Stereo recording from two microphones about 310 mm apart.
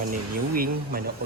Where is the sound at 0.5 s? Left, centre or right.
Right.